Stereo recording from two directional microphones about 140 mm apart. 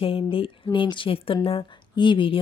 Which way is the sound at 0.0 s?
40° left (ahead or behind).